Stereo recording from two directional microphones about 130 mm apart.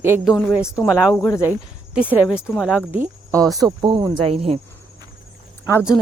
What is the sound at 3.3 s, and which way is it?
Speech, 25° right (ahead or behind).